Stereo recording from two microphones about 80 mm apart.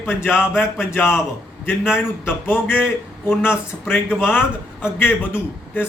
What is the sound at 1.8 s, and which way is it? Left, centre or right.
Speech, centre.